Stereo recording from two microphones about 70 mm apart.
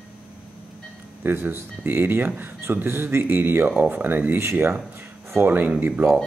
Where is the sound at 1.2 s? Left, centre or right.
Right.